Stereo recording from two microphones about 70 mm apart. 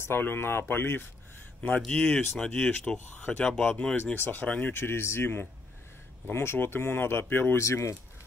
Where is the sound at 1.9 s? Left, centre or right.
Centre.